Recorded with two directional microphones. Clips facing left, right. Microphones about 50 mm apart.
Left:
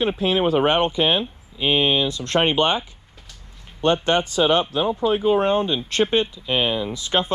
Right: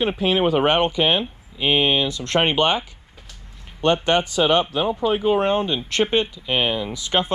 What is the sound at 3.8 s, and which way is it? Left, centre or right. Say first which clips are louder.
Speech: right 1 dB; right.